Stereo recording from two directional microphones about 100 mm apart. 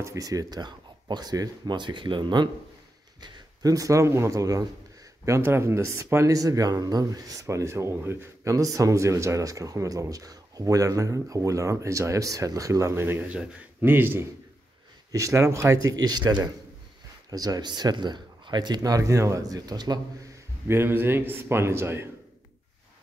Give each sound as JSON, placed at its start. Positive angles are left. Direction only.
{"t": 0.0, "sound": "speech", "side_deg": -35}
{"t": 13.3, "sound": "a man's voice", "side_deg": -15}
{"t": 15.0, "sound": "speech", "side_deg": -30}
{"t": 20.6, "sound": "a man's voice", "side_deg": -25}